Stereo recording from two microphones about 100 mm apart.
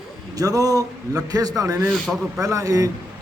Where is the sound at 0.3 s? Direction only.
35° right (ahead or behind).